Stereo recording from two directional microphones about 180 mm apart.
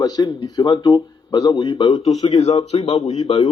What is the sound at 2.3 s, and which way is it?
Speech, 35° left (ahead or behind).